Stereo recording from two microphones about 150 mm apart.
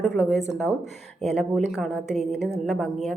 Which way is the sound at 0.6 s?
Centre (ahead or behind).